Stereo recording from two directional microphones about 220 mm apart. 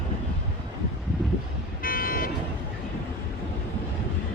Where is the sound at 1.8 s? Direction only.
40° left (ahead or behind).